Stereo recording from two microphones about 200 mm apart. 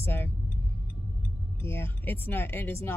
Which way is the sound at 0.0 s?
10° left (ahead or behind).